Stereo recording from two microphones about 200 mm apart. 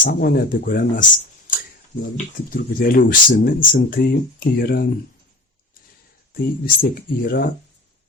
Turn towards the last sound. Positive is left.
turn(degrees=45)  # may be behind; listen again after turning